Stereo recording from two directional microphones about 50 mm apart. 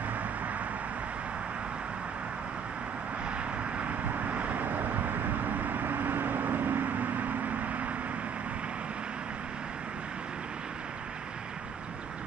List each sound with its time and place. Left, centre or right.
4.1 s vehicle: right